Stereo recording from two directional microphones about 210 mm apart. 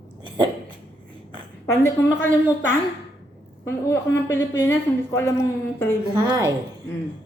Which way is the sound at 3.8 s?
10° left (ahead or behind).